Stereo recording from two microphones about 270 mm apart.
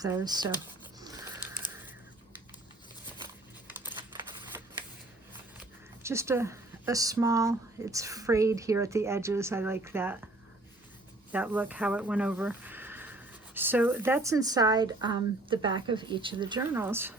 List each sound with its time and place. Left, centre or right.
0.0 s speech: centre
1.0 s a sound: centre
3.7 s typing: centre
5.5 s speech: centre
11.3 s speech: centre